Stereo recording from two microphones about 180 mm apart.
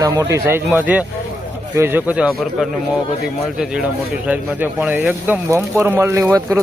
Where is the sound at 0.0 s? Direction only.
20° right (ahead or behind); by 2.6 s 5° right (ahead or behind).